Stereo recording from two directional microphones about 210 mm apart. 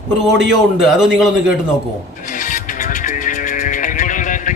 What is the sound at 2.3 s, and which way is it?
Music, 40° left (ahead or behind).